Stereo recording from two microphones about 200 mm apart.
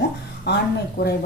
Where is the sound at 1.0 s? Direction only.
45° left (ahead or behind).